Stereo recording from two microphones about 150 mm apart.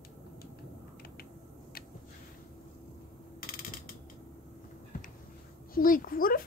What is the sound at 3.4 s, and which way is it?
Mechanisms, 75° left (ahead or behind).